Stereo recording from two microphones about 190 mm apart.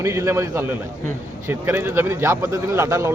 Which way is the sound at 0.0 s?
15° right (ahead or behind).